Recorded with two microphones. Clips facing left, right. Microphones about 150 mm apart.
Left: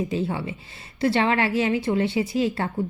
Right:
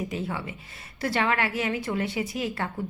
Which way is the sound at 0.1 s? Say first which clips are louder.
Left 5 dB; 30° left (ahead or behind).